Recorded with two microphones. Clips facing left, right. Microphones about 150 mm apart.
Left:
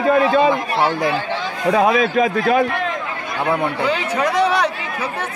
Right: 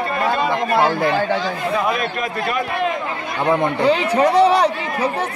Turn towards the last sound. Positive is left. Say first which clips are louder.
# right 4 dB
turn(degrees=-35)  # may be behind; listen again after turning